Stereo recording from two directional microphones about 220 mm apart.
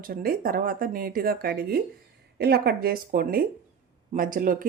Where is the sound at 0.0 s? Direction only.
40° right (ahead or behind).